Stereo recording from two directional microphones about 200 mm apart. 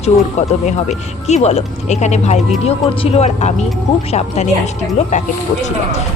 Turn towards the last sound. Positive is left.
turn(degrees=35)  # may be behind; listen again after turning